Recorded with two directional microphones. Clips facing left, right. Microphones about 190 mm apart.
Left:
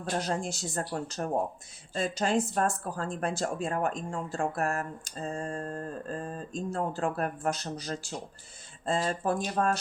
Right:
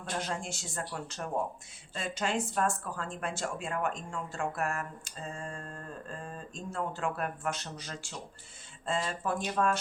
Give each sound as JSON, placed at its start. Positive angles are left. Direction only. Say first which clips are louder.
{"t": 0.1, "sound": "speech", "louder": "left 5 dB", "side_deg": 40}